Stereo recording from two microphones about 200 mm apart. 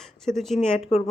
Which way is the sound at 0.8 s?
30° left (ahead or behind).